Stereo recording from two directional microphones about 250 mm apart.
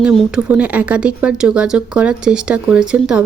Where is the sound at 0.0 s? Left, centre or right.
Centre.